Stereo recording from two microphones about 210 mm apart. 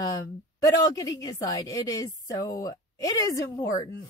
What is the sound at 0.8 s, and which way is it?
A woman's voice, 15° left (ahead or behind).